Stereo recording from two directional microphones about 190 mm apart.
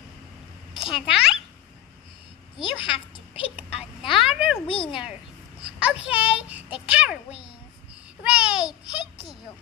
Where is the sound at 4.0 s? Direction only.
30° left (ahead or behind).